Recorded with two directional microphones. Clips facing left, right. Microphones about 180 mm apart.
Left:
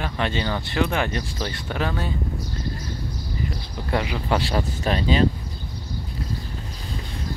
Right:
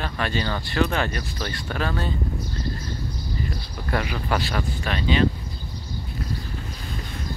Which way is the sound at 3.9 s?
20° left (ahead or behind).